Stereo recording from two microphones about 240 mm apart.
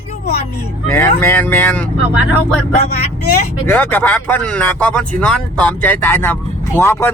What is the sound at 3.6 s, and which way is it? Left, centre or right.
Speech, centre.